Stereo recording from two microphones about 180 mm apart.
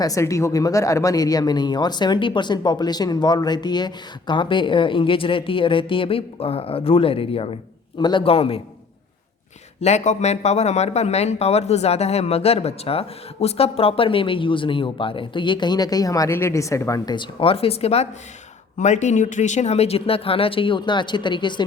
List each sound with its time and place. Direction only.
0.0 s speech: 20° left (ahead or behind)
9.8 s speech: 40° left (ahead or behind)